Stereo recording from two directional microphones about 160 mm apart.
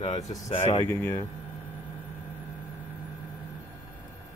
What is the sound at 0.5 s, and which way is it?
Speech, 35° left (ahead or behind).